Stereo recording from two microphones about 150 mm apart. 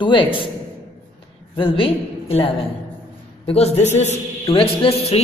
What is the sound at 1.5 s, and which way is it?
Speech, 35° left (ahead or behind).